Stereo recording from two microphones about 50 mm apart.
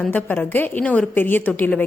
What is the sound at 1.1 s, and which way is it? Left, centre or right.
Speech, left.